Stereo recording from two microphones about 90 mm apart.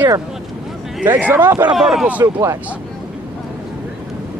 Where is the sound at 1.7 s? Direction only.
5° right (ahead or behind).